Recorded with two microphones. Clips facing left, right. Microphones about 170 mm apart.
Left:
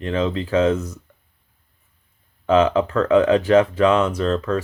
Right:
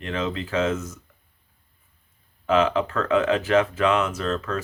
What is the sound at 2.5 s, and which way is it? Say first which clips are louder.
Speech: left 4 dB; 35° left (ahead or behind).